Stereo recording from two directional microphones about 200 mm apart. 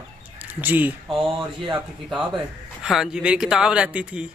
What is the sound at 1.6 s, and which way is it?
Speech, 25° right (ahead or behind).